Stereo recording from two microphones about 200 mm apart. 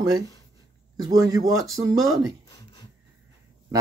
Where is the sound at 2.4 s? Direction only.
20° left (ahead or behind).